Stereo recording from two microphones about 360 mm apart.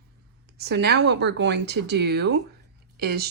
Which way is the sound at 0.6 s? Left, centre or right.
Right.